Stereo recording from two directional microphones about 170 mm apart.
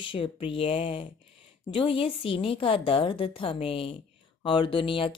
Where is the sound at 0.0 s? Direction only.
30° left (ahead or behind).